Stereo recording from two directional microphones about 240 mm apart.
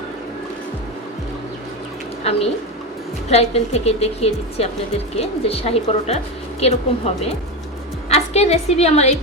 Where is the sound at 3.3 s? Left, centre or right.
Left.